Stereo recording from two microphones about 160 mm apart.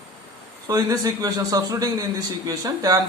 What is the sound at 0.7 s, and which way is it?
Speech, 25° right (ahead or behind).